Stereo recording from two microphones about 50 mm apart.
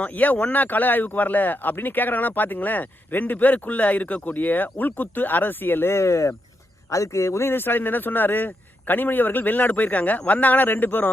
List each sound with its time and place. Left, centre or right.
0.0 s speech: left
6.0 s speech: left
7.4 s speech: left